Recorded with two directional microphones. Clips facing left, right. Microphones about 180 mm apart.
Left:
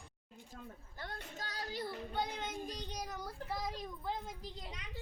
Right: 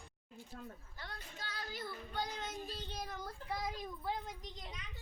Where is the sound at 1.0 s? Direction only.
50° left (ahead or behind).